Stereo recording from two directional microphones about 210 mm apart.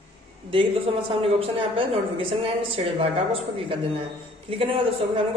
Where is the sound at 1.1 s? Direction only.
25° right (ahead or behind).